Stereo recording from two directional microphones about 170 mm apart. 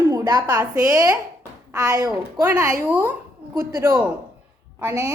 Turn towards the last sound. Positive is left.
turn(degrees=-20)  # may be behind; listen again after turning